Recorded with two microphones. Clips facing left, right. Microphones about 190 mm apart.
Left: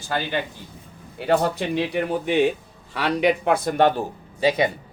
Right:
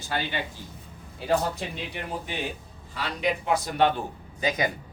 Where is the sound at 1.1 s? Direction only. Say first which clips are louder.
Left 5 dB; 70° left (ahead or behind); by 4.0 s 50° left (ahead or behind).